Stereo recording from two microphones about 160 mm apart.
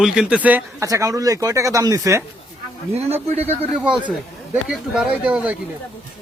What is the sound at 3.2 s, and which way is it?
Speech, 40° right (ahead or behind).